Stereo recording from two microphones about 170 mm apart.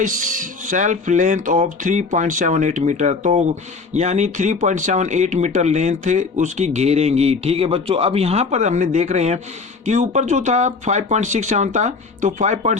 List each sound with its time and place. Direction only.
0.0 s speech: 50° right (ahead or behind)